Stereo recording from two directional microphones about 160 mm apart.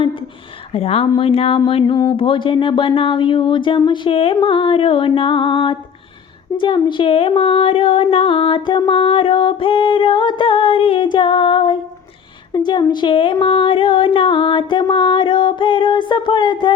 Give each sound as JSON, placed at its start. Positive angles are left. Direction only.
{"t": 0.7, "sound": "a woman's voice", "side_deg": 40}